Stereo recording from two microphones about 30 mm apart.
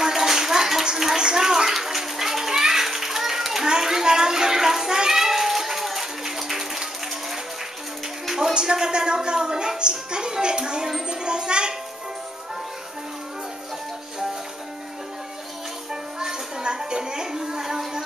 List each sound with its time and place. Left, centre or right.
0.0 s bathtub: centre
0.9 s a sound: centre
1.9 s children playing: centre
3.6 s a sound: right
8.5 s speech: right
15.9 s music: right